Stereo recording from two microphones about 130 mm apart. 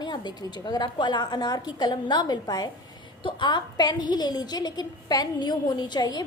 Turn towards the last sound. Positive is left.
turn(degrees=35)  # may be behind; listen again after turning